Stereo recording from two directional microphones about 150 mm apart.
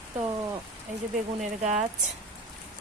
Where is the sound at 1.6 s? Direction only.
50° right (ahead or behind).